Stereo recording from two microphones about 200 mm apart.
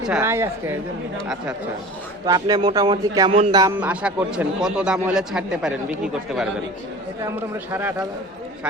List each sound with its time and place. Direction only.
0.1 s a woman's voice: 10° right (ahead or behind)
2.2 s speech: 20° right (ahead or behind)
3.6 s speech: 10° right (ahead or behind)
7.3 s a woman's voice: 10° right (ahead or behind)